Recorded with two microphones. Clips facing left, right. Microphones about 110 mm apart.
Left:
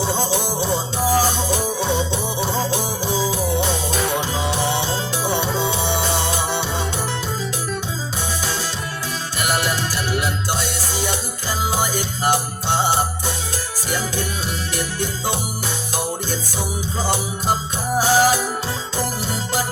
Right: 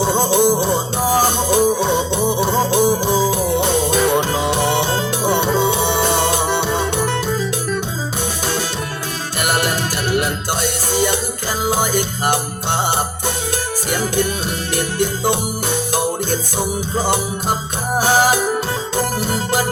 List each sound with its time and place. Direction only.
0.0 s music: 55° right (ahead or behind)
9.4 s music: 55° right (ahead or behind)
14.9 s organ: 55° right (ahead or behind)
16.0 s music: 55° right (ahead or behind)